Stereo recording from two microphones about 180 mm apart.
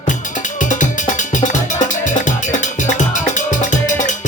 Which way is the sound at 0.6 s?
45° left (ahead or behind).